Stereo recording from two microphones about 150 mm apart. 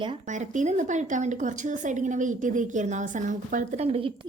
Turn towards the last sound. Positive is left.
turn(degrees=-40)  # may be behind; listen again after turning